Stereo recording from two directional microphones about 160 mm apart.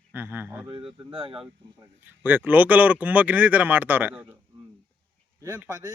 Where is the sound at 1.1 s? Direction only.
35° right (ahead or behind).